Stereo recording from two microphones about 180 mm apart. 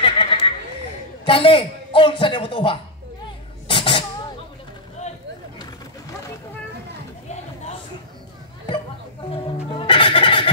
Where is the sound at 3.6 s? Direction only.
25° left (ahead or behind).